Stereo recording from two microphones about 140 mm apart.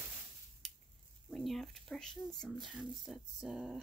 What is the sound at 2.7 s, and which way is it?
Speech, 5° right (ahead or behind).